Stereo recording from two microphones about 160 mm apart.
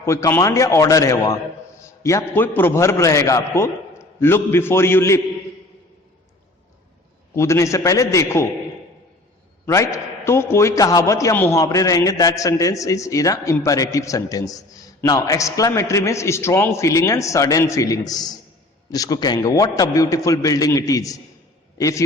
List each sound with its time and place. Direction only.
0.0 s a man's voice: 15° left (ahead or behind)
7.3 s a man's voice: 20° left (ahead or behind)
9.6 s a man's voice: 20° left (ahead or behind)